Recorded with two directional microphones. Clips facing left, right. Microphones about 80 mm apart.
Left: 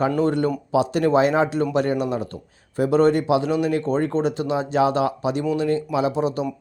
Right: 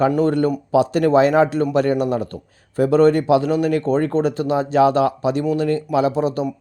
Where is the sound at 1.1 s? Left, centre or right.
Right.